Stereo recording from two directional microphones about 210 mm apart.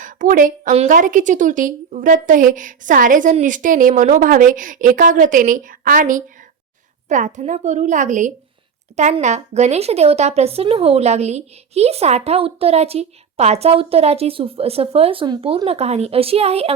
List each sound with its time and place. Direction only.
0.0 s a woman's voice: 40° right (ahead or behind)